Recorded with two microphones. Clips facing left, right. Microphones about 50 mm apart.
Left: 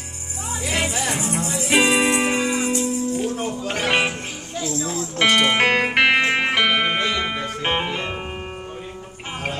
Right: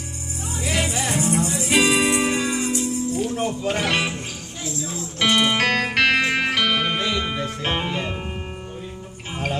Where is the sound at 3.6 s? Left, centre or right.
Left.